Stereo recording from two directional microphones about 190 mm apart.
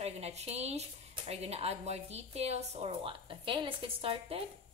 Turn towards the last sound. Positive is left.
turn(degrees=-30)  # may be behind; listen again after turning